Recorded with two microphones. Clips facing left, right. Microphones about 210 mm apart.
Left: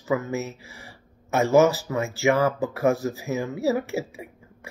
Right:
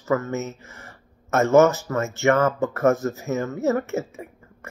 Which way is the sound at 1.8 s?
15° left (ahead or behind).